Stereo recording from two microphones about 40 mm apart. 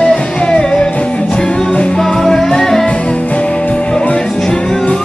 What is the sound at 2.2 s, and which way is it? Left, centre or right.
Music, centre.